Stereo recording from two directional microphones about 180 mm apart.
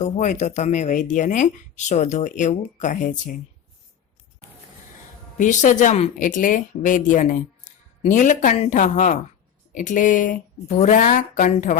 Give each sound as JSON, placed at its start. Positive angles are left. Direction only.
{"t": 0.0, "sound": "speech", "side_deg": 40}
{"t": 5.4, "sound": "speech", "side_deg": 45}